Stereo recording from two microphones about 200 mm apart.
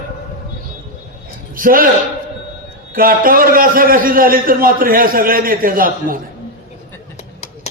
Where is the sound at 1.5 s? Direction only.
45° right (ahead or behind).